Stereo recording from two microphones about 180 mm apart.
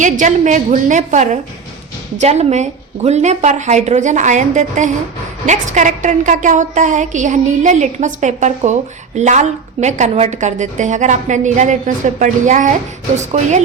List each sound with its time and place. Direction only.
0.0 s a woman's voice: 45° right (ahead or behind)